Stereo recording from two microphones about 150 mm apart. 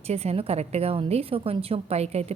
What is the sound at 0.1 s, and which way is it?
A woman's voice, 45° right (ahead or behind).